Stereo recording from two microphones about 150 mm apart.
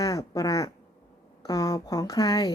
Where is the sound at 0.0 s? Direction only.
25° left (ahead or behind).